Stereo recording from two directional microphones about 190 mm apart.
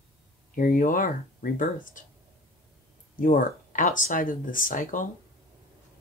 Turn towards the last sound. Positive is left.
turn(degrees=45)  # may be behind; listen again after turning